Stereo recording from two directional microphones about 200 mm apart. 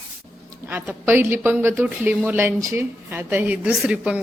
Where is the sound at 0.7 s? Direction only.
10° right (ahead or behind).